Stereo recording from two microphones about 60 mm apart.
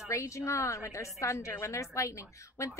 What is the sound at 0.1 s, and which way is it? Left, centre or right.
A woman's voice, left.